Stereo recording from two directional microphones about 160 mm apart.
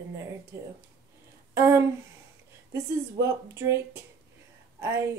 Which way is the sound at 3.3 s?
15° right (ahead or behind).